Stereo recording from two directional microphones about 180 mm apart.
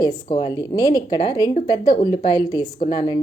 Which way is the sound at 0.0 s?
25° left (ahead or behind).